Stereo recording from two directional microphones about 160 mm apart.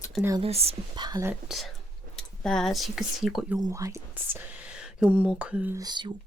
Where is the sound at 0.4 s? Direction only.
40° right (ahead or behind).